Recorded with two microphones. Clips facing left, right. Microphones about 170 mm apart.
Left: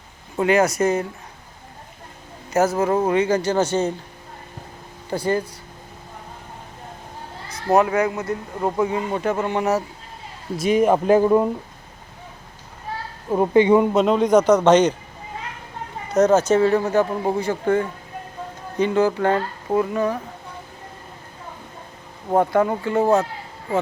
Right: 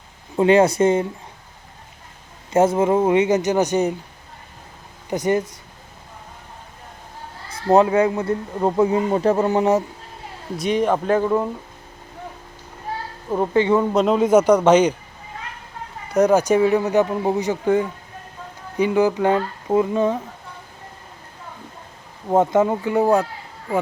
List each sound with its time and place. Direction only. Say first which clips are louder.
0.4 s speech: right 3 dB; 30° right (ahead or behind)
2.5 s speech: right 3 dB; 25° right (ahead or behind)
2.9 s speech: right 2 dB; 10° right (ahead or behind)
5.0 s speech: right 2 dB; 20° right (ahead or behind)
7.7 s speech: right 3 dB; 25° right (ahead or behind)
10.6 s a man's voice: left 2 dB; 5° left (ahead or behind)
13.3 s a man's voice: left 3 dB; 15° left (ahead or behind)
13.9 s speech: right 1 dB; centre (ahead or behind)
16.1 s speech: even; 15° right (ahead or behind)
22.6 s speech: right 1 dB; 10° right (ahead or behind)